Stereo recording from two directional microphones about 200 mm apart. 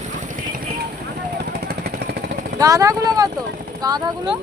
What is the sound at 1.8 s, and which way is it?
Vehicle, 50° right (ahead or behind).